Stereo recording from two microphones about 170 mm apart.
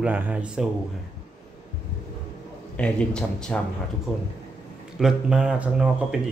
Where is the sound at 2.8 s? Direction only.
5° left (ahead or behind).